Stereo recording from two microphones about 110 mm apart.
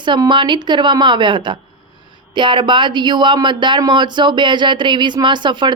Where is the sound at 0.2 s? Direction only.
45° right (ahead or behind).